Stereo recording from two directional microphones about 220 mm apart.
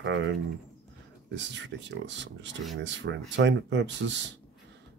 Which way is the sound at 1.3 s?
55° right (ahead or behind).